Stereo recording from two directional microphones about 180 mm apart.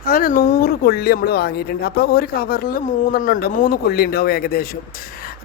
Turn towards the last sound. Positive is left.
turn(degrees=60)  # may be behind; listen again after turning